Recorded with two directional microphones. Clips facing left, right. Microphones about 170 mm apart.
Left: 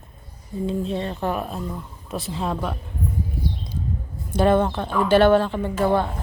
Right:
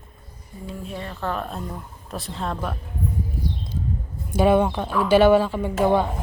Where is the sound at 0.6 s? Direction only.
25° left (ahead or behind).